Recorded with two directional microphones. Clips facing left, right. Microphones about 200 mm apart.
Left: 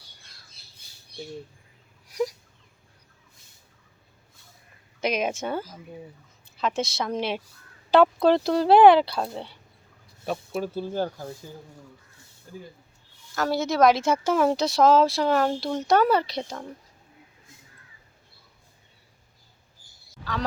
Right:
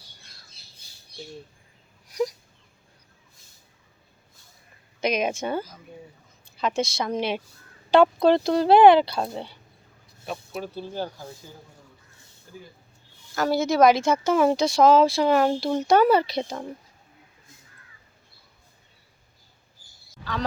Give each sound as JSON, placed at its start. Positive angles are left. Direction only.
{"t": 4.9, "sound": "speech", "side_deg": 5}
{"t": 10.2, "sound": "speech", "side_deg": 40}
{"t": 13.3, "sound": "speech", "side_deg": 0}